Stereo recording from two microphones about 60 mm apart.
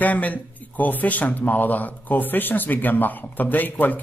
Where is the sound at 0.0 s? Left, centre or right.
Left.